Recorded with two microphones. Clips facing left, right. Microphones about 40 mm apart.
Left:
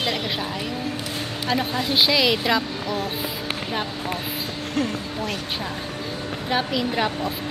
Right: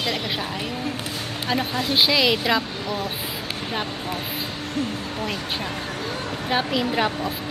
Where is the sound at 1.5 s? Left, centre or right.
Centre.